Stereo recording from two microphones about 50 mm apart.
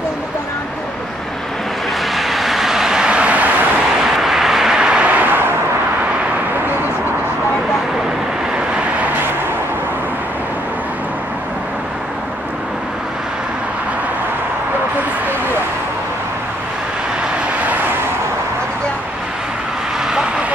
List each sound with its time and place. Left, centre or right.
2.1 s vehicle: centre; by 3.5 s right
4.0 s vehicle: centre
5.1 s vehicle: right